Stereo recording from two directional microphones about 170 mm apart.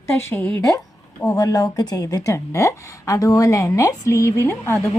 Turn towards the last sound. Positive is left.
turn(degrees=15)  # may be behind; listen again after turning